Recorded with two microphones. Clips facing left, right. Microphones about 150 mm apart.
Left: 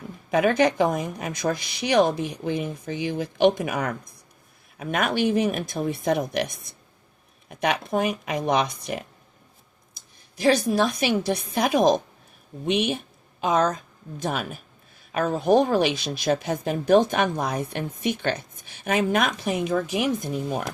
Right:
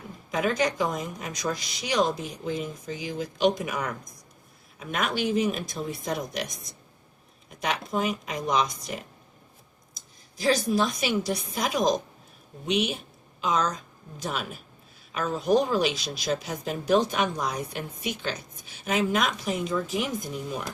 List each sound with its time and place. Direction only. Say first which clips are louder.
0.3 s a woman's voice: left 6 dB; 60° left (ahead or behind)